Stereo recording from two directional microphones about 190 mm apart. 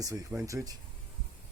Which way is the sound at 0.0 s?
15° right (ahead or behind).